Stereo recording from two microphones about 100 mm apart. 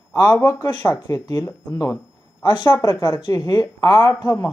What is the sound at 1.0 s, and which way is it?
Speech, 40° left (ahead or behind).